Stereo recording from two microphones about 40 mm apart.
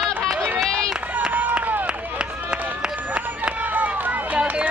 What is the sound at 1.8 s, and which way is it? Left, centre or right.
Run, right.